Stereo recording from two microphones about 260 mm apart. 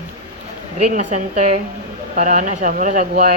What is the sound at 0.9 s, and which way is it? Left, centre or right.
A woman's voice, right.